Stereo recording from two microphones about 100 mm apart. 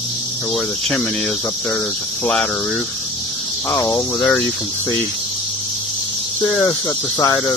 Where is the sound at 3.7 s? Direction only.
35° left (ahead or behind).